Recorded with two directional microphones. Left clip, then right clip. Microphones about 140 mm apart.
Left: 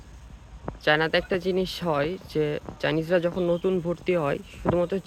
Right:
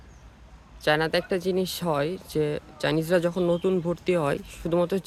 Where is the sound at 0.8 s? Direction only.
25° right (ahead or behind).